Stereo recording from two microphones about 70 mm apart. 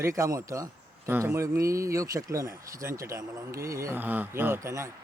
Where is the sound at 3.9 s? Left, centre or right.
Right.